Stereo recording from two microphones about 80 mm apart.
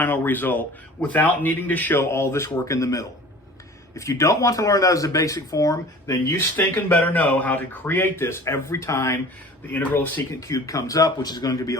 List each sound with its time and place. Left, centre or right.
0.0 s speech: left
6.6 s speech: left
9.7 s speech: left
10.4 s speech: left